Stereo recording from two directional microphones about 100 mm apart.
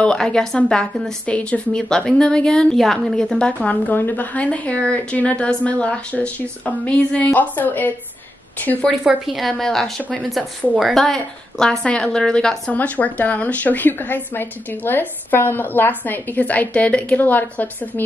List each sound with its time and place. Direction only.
0.0 s a woman's voice: 10° left (ahead or behind)
8.8 s a woman's voice: 5° right (ahead or behind); by 18.0 s 20° left (ahead or behind)